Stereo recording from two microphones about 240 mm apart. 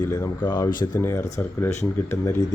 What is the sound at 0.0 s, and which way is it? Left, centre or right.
Speech, centre.